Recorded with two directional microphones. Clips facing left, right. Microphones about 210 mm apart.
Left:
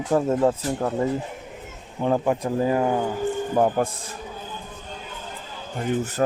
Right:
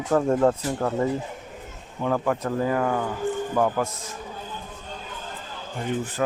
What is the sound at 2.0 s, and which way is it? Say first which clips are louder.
Speech: left 2 dB; 25° left (ahead or behind).